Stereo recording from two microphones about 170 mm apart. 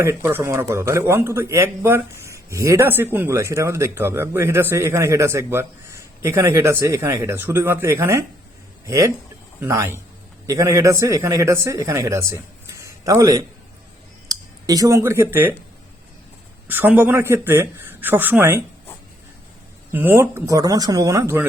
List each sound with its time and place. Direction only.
0.0 s a man's voice: 15° right (ahead or behind)
16.6 s a man's voice: 10° right (ahead or behind)
19.9 s a man's voice: 10° right (ahead or behind)